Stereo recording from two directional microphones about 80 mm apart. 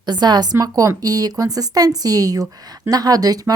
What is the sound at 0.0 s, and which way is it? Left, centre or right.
Speech, right.